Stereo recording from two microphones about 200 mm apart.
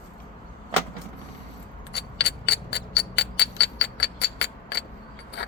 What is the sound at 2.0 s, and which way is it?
Music, 60° left (ahead or behind).